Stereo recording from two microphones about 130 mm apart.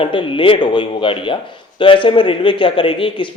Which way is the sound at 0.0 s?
40° left (ahead or behind).